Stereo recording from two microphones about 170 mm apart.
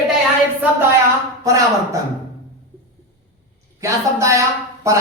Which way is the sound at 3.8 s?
20° right (ahead or behind).